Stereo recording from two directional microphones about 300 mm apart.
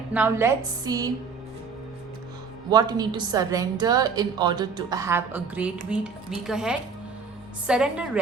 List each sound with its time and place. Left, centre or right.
0.1 s a woman's voice: centre
2.6 s a woman's voice: centre